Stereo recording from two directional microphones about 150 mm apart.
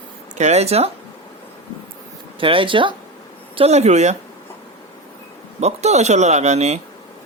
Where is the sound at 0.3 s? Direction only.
50° right (ahead or behind).